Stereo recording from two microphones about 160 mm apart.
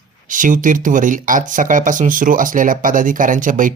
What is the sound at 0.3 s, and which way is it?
Speech, 55° right (ahead or behind).